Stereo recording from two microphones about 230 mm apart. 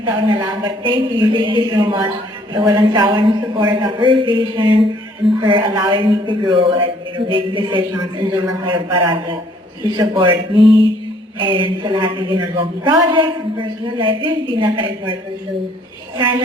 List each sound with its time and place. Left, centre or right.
0.0 s a man's voice: centre